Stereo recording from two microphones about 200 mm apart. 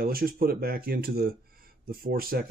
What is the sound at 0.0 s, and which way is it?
Speech, 45° right (ahead or behind).